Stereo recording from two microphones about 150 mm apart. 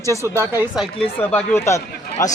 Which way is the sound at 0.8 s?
10° left (ahead or behind).